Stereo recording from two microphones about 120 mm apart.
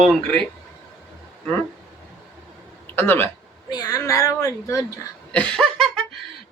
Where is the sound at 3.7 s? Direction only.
30° left (ahead or behind).